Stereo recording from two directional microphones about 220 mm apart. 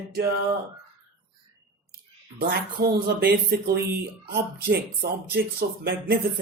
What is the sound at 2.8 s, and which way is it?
Speech, 45° right (ahead or behind).